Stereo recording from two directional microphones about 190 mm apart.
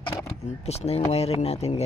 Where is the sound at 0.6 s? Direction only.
35° left (ahead or behind).